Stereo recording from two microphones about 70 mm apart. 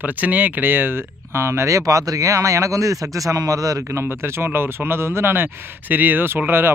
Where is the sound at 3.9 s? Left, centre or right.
Right.